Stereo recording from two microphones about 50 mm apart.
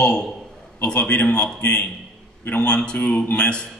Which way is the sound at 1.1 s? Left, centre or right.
Left.